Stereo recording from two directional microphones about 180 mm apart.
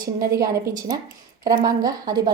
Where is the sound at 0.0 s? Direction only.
20° right (ahead or behind).